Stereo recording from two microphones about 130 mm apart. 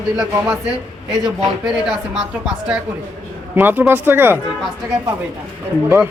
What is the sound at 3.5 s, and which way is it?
Speech, 15° right (ahead or behind).